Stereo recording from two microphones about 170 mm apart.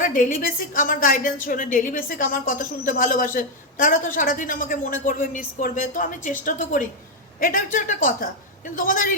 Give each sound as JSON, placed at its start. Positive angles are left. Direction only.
{"t": 0.0, "sound": "a woman's voice", "side_deg": 50}